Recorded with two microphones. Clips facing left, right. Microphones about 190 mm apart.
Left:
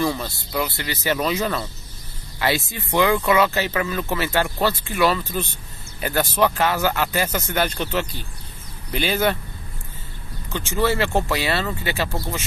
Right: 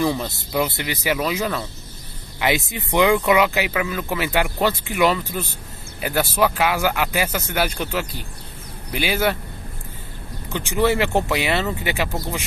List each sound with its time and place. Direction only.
0.0 s speech: 15° right (ahead or behind)
2.7 s speech: 15° right (ahead or behind)
10.5 s speech: 15° right (ahead or behind)